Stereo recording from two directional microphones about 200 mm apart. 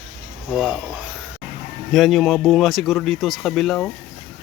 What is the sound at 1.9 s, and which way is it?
Speech, centre (ahead or behind).